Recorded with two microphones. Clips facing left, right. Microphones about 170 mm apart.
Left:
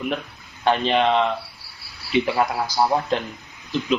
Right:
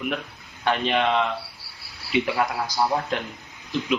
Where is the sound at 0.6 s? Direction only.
30° left (ahead or behind).